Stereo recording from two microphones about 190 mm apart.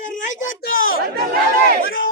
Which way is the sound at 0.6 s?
50° left (ahead or behind).